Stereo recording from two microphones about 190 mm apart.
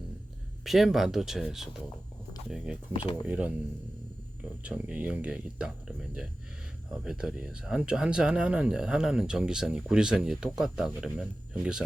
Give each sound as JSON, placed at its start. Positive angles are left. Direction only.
{"t": 0.6, "sound": "speech", "side_deg": 0}
{"t": 2.9, "sound": "speech", "side_deg": 25}
{"t": 3.2, "sound": "speech", "side_deg": -5}
{"t": 4.6, "sound": "speech", "side_deg": -5}